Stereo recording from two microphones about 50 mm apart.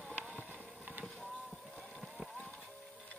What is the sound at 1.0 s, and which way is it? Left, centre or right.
Vehicle, centre.